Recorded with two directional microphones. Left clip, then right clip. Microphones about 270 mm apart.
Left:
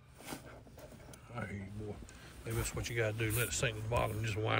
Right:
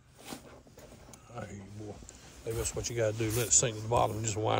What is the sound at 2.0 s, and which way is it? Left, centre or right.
Speech, centre.